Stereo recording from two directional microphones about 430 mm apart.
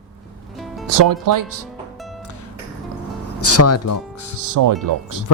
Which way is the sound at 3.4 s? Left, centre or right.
Left.